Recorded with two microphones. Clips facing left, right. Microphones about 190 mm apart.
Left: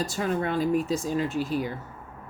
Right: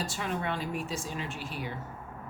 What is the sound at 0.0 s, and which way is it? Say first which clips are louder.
Speech: left 6 dB; 40° left (ahead or behind).